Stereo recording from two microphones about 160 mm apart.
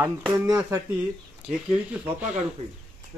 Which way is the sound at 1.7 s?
10° right (ahead or behind).